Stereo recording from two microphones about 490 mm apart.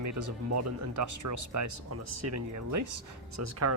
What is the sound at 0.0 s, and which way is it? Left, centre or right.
Speech, right.